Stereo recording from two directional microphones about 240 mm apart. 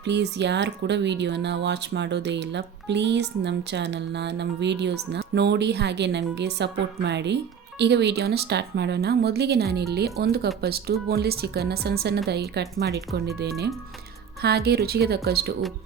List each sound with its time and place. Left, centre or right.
0.0 s speech: right